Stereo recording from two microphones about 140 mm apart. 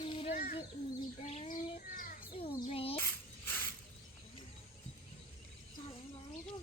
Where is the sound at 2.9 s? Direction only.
15° left (ahead or behind).